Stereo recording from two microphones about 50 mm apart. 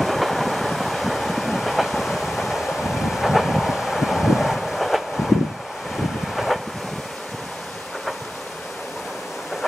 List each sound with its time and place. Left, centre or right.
0.0 s train: centre
6.3 s vehicle: centre